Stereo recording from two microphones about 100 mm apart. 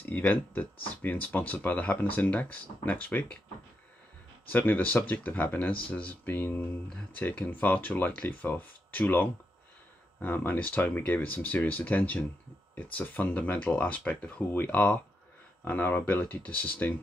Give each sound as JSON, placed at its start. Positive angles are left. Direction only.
{"t": 0.0, "sound": "speech", "side_deg": 20}
{"t": 4.5, "sound": "speech", "side_deg": 15}